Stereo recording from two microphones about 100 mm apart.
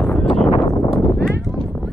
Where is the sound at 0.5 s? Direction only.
35° left (ahead or behind).